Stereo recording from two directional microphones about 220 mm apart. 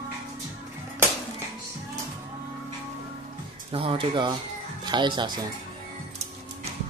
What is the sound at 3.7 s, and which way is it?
Speech, 25° right (ahead or behind).